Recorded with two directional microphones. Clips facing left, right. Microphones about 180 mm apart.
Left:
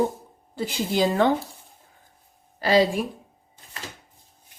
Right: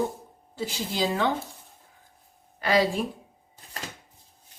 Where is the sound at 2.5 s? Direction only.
30° left (ahead or behind).